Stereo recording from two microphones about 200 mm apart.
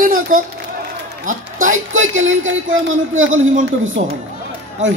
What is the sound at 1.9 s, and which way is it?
A man's voice, 75° right (ahead or behind).